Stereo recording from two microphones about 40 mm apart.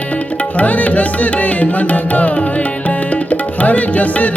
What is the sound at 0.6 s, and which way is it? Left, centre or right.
Music, left.